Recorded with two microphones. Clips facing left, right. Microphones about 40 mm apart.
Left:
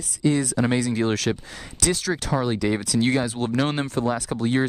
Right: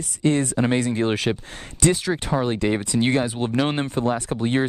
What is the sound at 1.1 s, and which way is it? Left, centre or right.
Speech, centre.